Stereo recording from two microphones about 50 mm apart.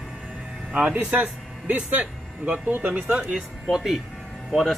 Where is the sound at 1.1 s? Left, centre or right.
Right.